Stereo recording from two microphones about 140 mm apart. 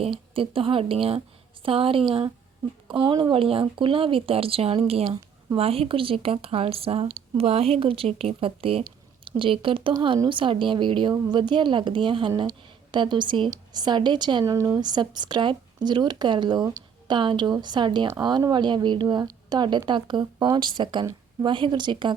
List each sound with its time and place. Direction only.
0.0 s speech: 40° right (ahead or behind)
14.4 s speech: 20° right (ahead or behind)